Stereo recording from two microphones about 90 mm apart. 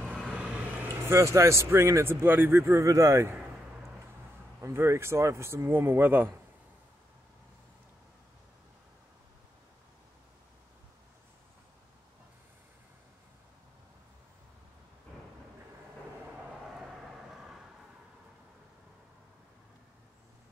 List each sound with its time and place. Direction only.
0.1 s vehicle: 10° right (ahead or behind)
0.8 s speech: 30° right (ahead or behind)
4.6 s speech: 30° right (ahead or behind)
16.4 s vehicle: 5° right (ahead or behind)